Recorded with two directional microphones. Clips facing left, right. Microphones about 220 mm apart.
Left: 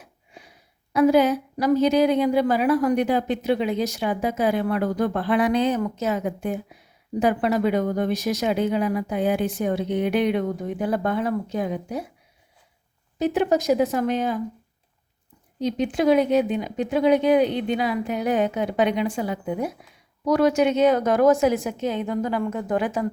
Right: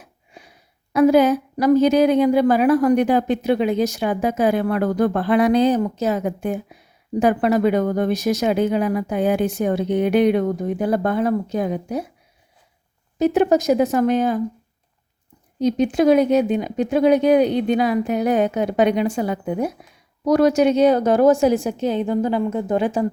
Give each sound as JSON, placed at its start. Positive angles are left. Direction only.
{"t": 0.9, "sound": "a woman's voice", "side_deg": -45}
{"t": 13.1, "sound": "a woman's voice", "side_deg": -45}
{"t": 15.5, "sound": "a woman's voice", "side_deg": -45}